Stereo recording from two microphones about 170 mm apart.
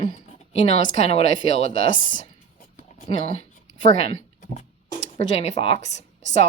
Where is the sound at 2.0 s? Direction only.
50° left (ahead or behind).